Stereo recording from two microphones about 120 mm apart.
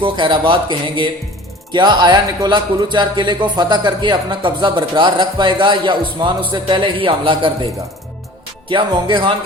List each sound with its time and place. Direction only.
0.0 s speech: 45° right (ahead or behind)
8.7 s speech: 40° right (ahead or behind)